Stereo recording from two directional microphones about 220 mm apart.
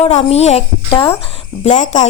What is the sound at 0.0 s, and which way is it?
A child's voice, 30° left (ahead or behind).